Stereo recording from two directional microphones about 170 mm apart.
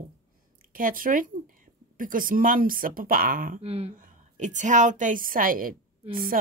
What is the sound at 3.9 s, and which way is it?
A woman's voice, 50° right (ahead or behind).